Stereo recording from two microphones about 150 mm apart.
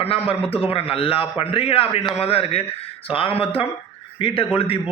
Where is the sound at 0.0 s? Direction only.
40° left (ahead or behind).